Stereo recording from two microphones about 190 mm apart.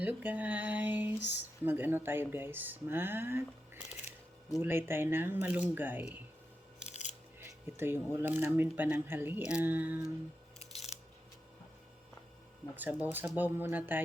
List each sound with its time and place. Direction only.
0.0 s speech: 10° right (ahead or behind)
6.8 s a sound: 35° left (ahead or behind)
7.3 s speech: 10° right (ahead or behind)
12.7 s speech: 10° right (ahead or behind)